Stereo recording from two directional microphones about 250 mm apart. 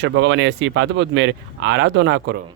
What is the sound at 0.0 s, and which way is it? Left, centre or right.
Speech, right.